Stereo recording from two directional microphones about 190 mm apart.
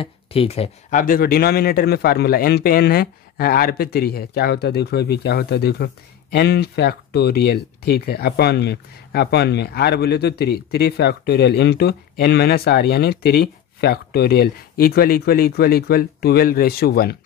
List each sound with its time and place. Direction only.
0.0 s speech: 30° left (ahead or behind); by 17.2 s 55° left (ahead or behind)